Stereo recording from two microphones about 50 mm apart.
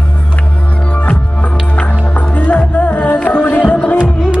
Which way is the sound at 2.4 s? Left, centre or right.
Left.